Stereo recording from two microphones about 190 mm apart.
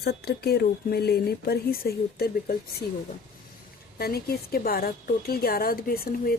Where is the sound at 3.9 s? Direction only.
55° left (ahead or behind).